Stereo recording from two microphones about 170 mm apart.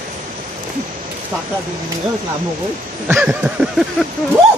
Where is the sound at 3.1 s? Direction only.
5° right (ahead or behind).